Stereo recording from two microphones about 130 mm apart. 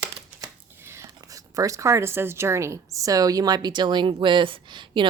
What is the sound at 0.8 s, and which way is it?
Speech, 20° right (ahead or behind).